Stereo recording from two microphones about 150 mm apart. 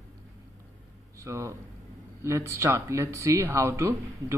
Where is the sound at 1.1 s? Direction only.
20° right (ahead or behind).